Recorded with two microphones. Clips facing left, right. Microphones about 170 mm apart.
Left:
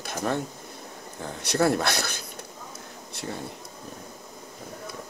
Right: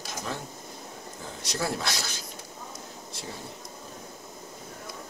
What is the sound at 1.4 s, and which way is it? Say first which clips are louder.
Speech: left 8 dB; 60° left (ahead or behind).